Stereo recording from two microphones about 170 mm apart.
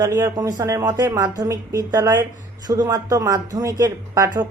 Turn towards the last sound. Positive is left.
turn(degrees=-20)  # may be behind; listen again after turning